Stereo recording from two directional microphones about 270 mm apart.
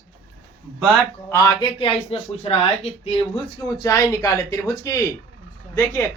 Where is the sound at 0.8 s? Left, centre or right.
Centre.